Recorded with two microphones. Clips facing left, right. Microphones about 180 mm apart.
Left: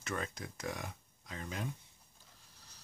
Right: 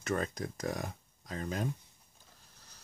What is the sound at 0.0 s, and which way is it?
Speech, 40° right (ahead or behind).